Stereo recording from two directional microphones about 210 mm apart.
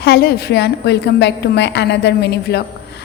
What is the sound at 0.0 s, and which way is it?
A woman's voice, 50° left (ahead or behind).